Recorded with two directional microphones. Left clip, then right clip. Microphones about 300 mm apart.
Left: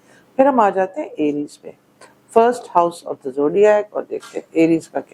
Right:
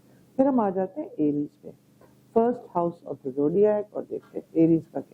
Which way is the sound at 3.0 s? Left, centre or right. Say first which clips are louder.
Left 7 dB; centre.